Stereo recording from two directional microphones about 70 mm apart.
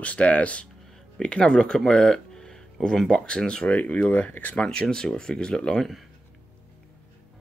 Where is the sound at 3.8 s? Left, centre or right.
Left.